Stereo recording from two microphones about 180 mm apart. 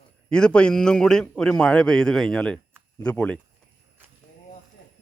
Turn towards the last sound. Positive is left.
turn(degrees=5)  # may be behind; listen again after turning